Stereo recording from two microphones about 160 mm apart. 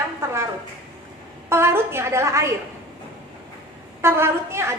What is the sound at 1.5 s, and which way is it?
A woman's voice, 15° right (ahead or behind).